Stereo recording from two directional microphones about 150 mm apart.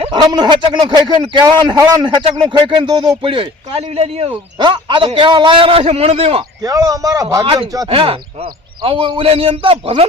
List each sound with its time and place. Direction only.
0.1 s a man's voice: 30° right (ahead or behind)
4.6 s a man's voice: 35° right (ahead or behind)
6.6 s speech: 25° right (ahead or behind)
7.4 s a man's voice: 35° right (ahead or behind)